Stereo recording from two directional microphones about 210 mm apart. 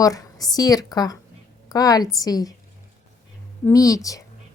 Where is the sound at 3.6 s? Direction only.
15° left (ahead or behind).